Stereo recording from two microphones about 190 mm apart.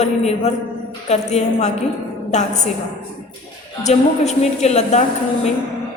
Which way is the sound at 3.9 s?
35° left (ahead or behind).